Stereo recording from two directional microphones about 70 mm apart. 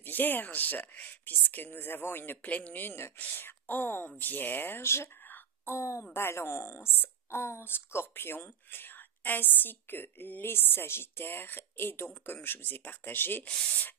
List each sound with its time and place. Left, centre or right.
0.0 s speech: left
2.4 s speech: left